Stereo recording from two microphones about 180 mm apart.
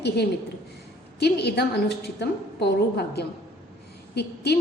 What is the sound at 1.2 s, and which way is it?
A woman's voice, 65° left (ahead or behind).